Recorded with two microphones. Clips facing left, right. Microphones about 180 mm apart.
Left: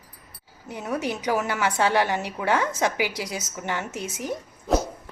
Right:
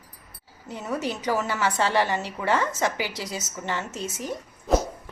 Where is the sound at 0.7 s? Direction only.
15° left (ahead or behind).